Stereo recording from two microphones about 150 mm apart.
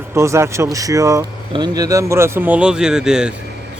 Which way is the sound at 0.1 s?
20° right (ahead or behind).